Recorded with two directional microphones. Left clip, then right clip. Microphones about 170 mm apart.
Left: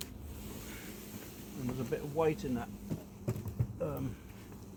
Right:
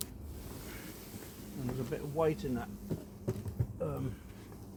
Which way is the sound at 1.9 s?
35° right (ahead or behind).